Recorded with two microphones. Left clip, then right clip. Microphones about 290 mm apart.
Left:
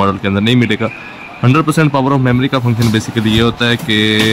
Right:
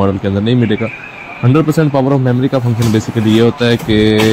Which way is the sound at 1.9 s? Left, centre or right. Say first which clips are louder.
Even; centre.